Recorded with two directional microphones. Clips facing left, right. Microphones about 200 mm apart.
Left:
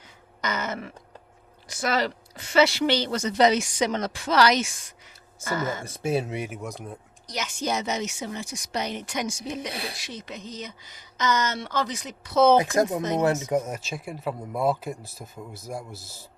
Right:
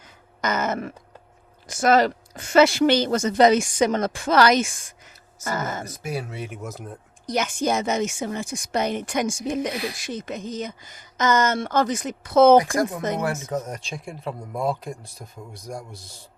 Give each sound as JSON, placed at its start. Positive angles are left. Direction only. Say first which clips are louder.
{"t": 0.4, "sound": "a woman's voice", "louder": "right 5 dB", "side_deg": -50}
{"t": 5.8, "sound": "speech", "louder": "left 4 dB", "side_deg": 25}
{"t": 6.5, "sound": "speech", "louder": "even", "side_deg": 0}
{"t": 7.3, "sound": "a woman's voice", "louder": "right 6 dB", "side_deg": -50}
{"t": 12.7, "sound": "speech", "louder": "left 1 dB", "side_deg": 25}
{"t": 13.5, "sound": "speech", "louder": "left 3 dB", "side_deg": 10}